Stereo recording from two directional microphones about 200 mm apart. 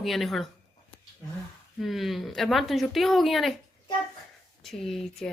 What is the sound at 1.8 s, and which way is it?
Speech, centre (ahead or behind).